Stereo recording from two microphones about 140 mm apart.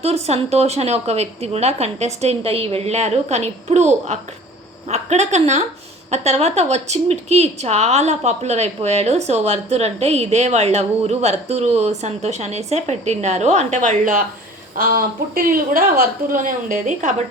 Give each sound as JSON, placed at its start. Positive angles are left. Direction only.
{"t": 0.0, "sound": "a woman's voice", "side_deg": -50}
{"t": 14.8, "sound": "a woman's voice", "side_deg": -90}